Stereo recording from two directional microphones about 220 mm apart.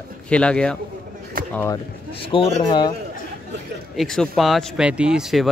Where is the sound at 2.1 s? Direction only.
25° left (ahead or behind).